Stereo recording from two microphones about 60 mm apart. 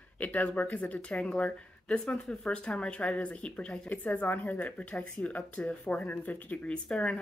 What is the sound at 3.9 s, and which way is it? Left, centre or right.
Speech, left.